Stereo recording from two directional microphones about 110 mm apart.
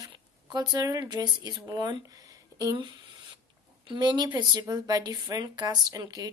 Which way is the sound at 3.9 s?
40° right (ahead or behind).